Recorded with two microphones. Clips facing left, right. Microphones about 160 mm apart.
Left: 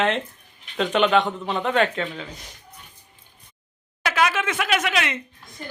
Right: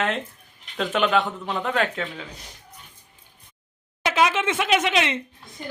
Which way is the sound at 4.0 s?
25° right (ahead or behind).